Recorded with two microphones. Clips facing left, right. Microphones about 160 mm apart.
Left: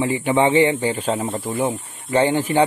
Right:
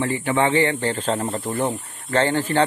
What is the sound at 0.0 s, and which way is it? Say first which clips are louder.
Speech: left 3 dB; 15° left (ahead or behind).